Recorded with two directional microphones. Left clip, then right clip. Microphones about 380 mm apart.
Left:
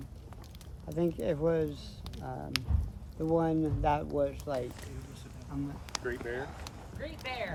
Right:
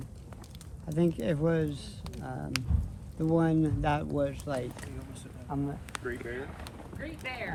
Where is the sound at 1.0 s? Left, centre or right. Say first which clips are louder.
Right 1 dB; right.